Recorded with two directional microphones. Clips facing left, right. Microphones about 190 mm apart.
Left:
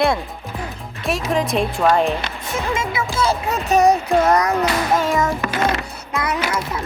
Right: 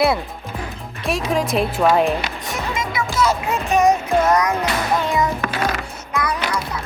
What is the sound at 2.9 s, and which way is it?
Music, 30° left (ahead or behind).